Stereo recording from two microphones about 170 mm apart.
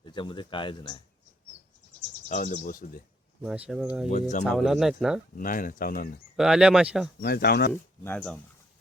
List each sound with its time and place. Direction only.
0.0 s speech: 25° left (ahead or behind)
2.3 s speech: 50° left (ahead or behind)
3.4 s speech: 5° right (ahead or behind)
4.1 s speech: 45° left (ahead or behind)
4.4 s speech: centre (ahead or behind)
5.4 s speech: 55° left (ahead or behind)
6.3 s speech: 5° right (ahead or behind)
7.2 s speech: 65° left (ahead or behind)
7.7 s speech: 10° left (ahead or behind)